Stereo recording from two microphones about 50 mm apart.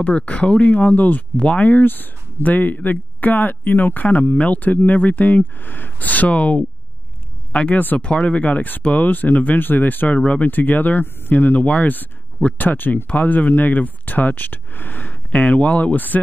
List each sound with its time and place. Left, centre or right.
0.0 s speech: left
1.3 s speech: left
7.8 s speech: left
8.1 s speech: left
15.3 s speech: left